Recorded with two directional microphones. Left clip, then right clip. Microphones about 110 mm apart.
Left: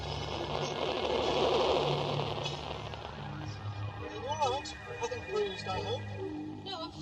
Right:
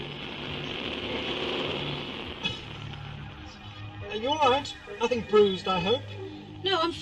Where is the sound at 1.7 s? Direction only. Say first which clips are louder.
Left 3 dB; 25° left (ahead or behind).